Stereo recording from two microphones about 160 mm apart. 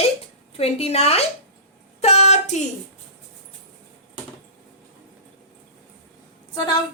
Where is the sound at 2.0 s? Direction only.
40° left (ahead or behind).